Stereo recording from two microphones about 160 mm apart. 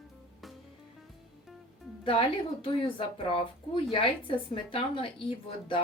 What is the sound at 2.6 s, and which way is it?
Speech, 35° left (ahead or behind).